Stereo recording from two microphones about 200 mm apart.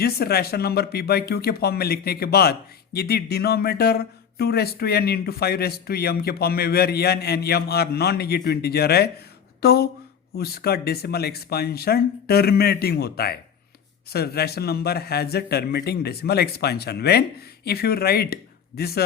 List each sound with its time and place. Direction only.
0.0 s speech: 50° left (ahead or behind)